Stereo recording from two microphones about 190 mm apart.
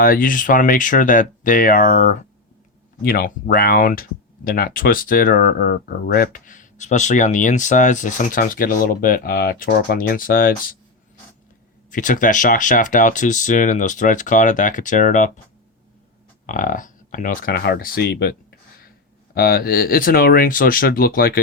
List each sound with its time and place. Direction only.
0.0 s speech: 50° left (ahead or behind)
11.9 s speech: 45° left (ahead or behind)
16.5 s speech: 45° left (ahead or behind)